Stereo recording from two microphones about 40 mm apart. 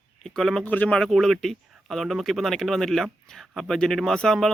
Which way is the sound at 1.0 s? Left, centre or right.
Centre.